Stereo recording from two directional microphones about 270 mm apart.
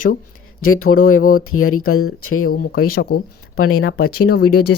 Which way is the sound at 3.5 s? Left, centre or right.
Left.